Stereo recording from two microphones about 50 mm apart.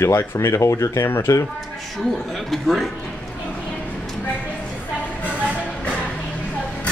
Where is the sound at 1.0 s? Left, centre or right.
Left.